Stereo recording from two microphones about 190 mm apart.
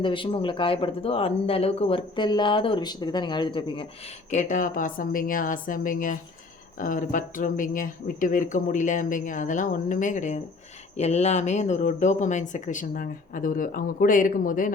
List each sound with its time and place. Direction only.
0.0 s speech: 25° left (ahead or behind)
4.3 s speech: 40° left (ahead or behind)